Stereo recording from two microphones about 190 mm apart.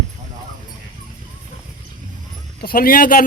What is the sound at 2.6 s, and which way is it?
Speech, 50° left (ahead or behind).